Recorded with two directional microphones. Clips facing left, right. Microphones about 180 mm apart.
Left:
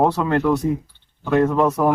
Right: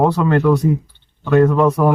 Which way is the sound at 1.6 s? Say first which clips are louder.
Right 3 dB; 5° left (ahead or behind).